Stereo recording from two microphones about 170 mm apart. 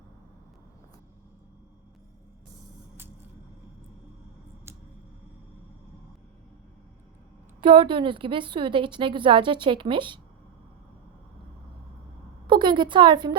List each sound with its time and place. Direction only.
7.6 s a woman's voice: 30° right (ahead or behind)
12.5 s a woman's voice: 30° right (ahead or behind)